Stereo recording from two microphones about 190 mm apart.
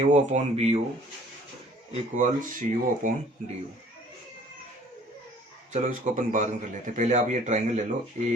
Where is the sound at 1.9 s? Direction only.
40° right (ahead or behind).